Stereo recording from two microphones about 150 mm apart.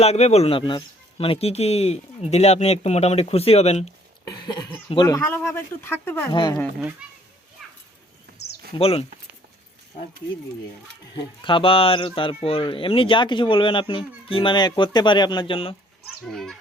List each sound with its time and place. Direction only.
0.0 s speech: 45° left (ahead or behind)
4.3 s speech: 30° left (ahead or behind)
6.2 s speech: 30° left (ahead or behind)
7.0 s a child's voice: 5° right (ahead or behind)
7.6 s children playing: centre (ahead or behind)
8.3 s a sound: 90° right
8.8 s speech: 40° left (ahead or behind)
11.1 s speech: 35° left (ahead or behind)
16.0 s speech: centre (ahead or behind)